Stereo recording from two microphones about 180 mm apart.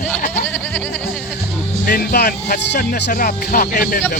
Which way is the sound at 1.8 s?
60° left (ahead or behind).